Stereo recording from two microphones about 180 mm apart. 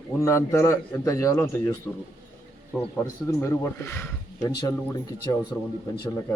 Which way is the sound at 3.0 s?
15° left (ahead or behind).